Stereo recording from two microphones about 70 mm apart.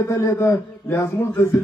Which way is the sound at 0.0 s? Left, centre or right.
Left.